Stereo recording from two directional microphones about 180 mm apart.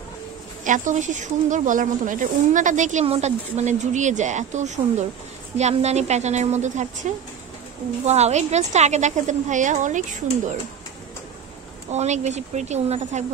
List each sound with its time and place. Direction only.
0.7 s a woman's voice: 45° right (ahead or behind)
8.0 s a woman's voice: 40° right (ahead or behind)
11.9 s a woman's voice: 40° right (ahead or behind)